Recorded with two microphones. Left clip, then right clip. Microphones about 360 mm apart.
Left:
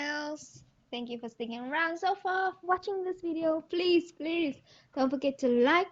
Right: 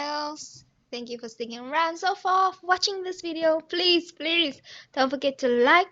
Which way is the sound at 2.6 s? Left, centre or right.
Right.